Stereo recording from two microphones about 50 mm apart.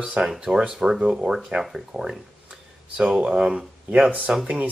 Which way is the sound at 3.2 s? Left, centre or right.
Right.